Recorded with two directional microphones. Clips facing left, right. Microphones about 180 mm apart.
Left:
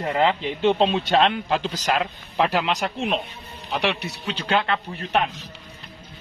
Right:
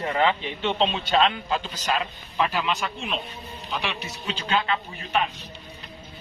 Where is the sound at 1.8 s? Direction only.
80° left.